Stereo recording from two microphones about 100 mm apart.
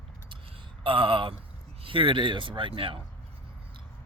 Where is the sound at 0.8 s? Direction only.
60° right (ahead or behind).